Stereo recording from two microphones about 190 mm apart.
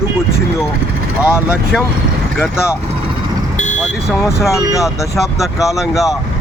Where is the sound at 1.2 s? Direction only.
5° right (ahead or behind).